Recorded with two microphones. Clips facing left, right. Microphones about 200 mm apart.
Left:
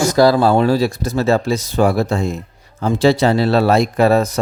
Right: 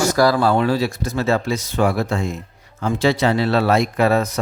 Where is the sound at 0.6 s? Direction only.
35° left (ahead or behind).